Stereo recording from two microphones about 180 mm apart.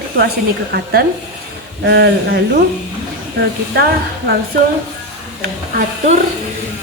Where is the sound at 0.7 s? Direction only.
60° right (ahead or behind).